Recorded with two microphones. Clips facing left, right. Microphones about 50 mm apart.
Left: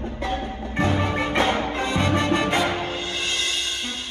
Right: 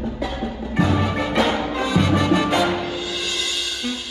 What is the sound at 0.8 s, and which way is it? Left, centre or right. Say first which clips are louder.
Music: right 2 dB; left.